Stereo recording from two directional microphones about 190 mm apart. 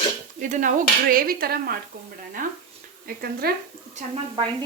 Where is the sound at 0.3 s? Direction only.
40° right (ahead or behind).